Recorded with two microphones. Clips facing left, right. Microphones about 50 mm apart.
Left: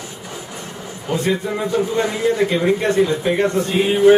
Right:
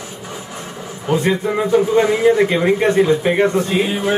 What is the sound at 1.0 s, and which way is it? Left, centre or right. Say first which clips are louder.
A man's voice: right 3 dB; centre.